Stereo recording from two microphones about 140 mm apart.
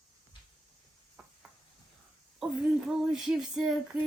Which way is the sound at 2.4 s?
5° right (ahead or behind).